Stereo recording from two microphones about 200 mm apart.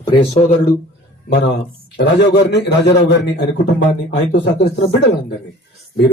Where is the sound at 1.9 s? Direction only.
55° left (ahead or behind).